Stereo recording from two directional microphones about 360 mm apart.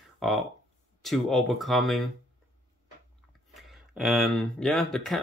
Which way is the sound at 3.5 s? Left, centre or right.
Centre.